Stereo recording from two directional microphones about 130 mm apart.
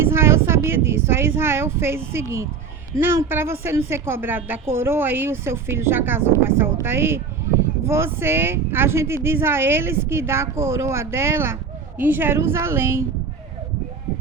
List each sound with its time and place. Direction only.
0.0 s a woman's voice: 20° right (ahead or behind)